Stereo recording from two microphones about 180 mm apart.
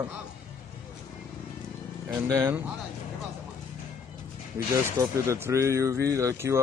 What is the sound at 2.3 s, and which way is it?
Speech, 10° right (ahead or behind).